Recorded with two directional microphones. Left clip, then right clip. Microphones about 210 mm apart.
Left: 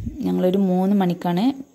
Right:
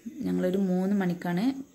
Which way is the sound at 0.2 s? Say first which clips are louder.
Left 8 dB; 25° left (ahead or behind).